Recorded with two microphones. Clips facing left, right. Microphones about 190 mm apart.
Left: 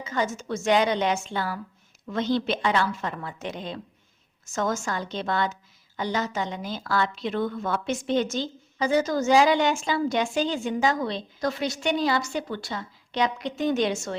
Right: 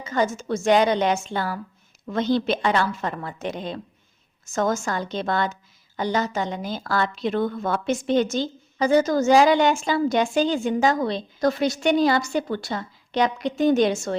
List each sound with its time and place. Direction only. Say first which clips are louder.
0.0 s a woman's voice: right 4 dB; 40° right (ahead or behind)